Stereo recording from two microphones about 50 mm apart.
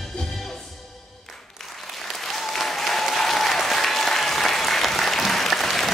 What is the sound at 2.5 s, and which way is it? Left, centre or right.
Applause, centre.